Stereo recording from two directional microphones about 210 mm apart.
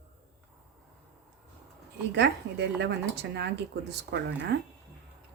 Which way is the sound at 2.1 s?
55° right (ahead or behind).